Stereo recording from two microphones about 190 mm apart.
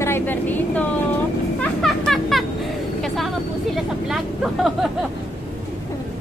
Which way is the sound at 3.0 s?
Centre (ahead or behind).